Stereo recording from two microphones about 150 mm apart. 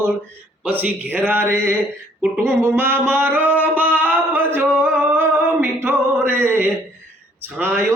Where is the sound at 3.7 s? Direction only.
10° right (ahead or behind).